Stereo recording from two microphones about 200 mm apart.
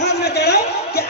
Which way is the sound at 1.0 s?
50° left (ahead or behind).